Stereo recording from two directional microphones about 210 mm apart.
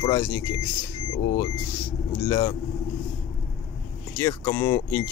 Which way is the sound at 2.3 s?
20° left (ahead or behind).